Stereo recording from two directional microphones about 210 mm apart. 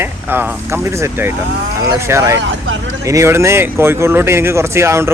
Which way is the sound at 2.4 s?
60° right (ahead or behind).